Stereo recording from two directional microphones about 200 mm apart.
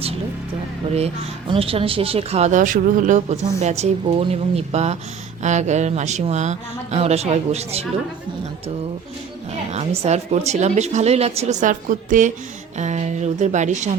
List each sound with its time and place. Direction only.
0.9 s a woman's voice: 30° right (ahead or behind)
9.7 s a woman's voice: 30° right (ahead or behind)